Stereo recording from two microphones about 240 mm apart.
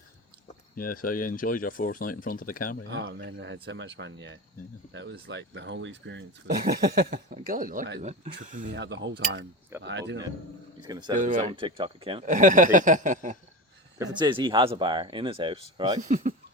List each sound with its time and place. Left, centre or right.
0.8 s speech: left
2.9 s speech: right
8.8 s speech: right
10.8 s speech: centre
11.2 s speech: right
12.3 s speech: right
14.0 s speech: centre
16.0 s speech: right